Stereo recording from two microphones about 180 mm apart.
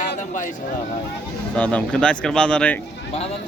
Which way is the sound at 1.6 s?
5° left (ahead or behind).